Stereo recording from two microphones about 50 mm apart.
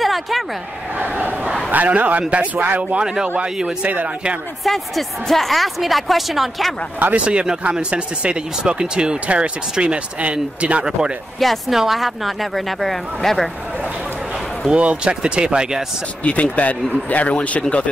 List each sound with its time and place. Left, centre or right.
0.0 s a sound: centre
0.9 s crowd: right
1.7 s a man's voice: right
3.4 s speech: centre
3.8 s a man's voice: right
4.6 s speech: centre
7.1 s speech: right
11.3 s speech: centre
14.7 s speech: right
16.6 s speech: left